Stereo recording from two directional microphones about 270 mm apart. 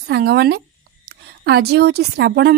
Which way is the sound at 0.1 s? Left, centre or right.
Right.